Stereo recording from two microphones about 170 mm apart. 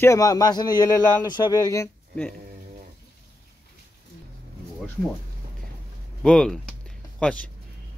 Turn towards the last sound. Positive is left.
turn(degrees=5)  # may be behind; listen again after turning